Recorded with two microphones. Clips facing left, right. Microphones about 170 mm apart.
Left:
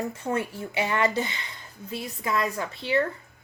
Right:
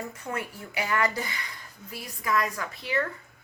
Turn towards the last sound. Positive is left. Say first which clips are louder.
# left 4 dB
turn(degrees=30)  # may be behind; listen again after turning